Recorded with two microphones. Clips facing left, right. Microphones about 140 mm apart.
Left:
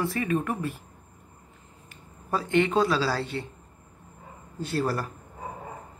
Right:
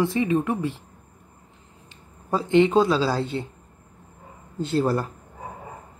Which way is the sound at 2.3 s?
25° right (ahead or behind).